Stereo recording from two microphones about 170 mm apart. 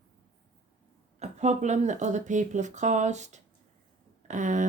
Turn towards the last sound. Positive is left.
turn(degrees=-45)  # may be behind; listen again after turning